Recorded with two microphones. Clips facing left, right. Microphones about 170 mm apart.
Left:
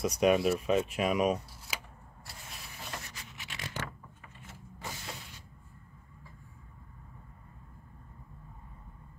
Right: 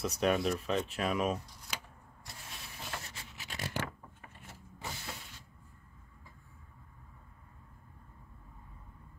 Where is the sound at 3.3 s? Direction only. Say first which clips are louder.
Right 3 dB; 40° right (ahead or behind).